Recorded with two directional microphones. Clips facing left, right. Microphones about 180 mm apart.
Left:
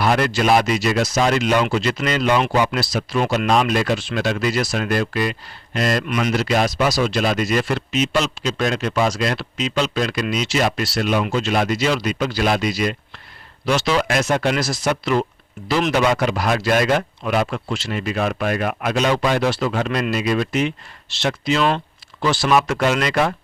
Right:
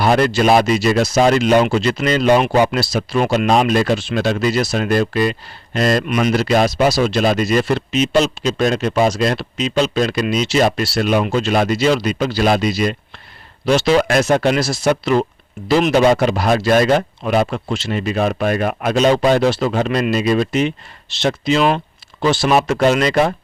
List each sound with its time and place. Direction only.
0.0 s speech: 30° right (ahead or behind)
6.1 s speech: 25° right (ahead or behind)
6.3 s speech: 40° right (ahead or behind)
14.4 s speech: 30° right (ahead or behind)